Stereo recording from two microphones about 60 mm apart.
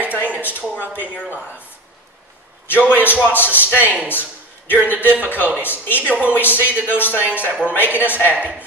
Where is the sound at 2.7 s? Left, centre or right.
Left.